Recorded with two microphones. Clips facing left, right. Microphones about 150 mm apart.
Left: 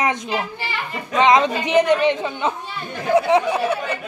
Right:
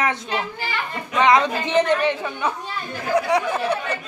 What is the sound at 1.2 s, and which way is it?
Speech, 20° left (ahead or behind).